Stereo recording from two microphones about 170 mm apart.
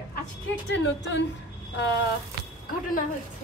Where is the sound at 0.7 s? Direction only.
90° left.